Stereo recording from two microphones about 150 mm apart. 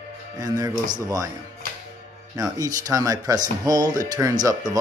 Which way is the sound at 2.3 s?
25° right (ahead or behind).